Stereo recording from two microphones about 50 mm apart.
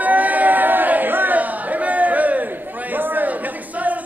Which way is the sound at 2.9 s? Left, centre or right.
Right.